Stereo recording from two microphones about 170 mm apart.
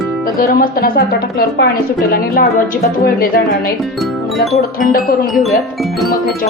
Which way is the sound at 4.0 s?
Centre (ahead or behind).